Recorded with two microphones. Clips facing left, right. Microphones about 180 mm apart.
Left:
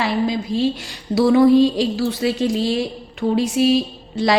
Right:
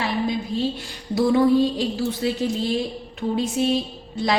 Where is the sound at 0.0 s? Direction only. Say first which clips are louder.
Left 4 dB; 90° left.